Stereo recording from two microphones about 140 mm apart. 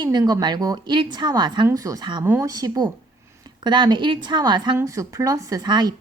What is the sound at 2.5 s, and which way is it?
A woman's voice, 25° right (ahead or behind).